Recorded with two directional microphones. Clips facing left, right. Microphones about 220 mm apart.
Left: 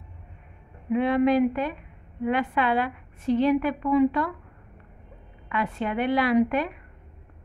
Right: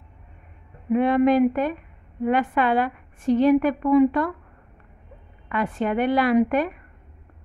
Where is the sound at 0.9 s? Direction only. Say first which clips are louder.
Right 3 dB; 50° right (ahead or behind).